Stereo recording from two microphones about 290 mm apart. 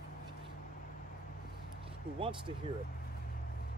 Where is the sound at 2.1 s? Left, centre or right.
Centre.